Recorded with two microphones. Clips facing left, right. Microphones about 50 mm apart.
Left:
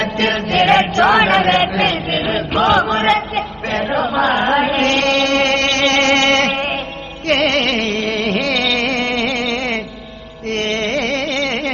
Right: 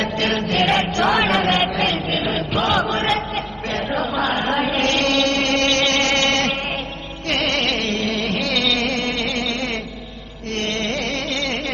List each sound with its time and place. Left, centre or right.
0.0 s chant: left
7.3 s music: left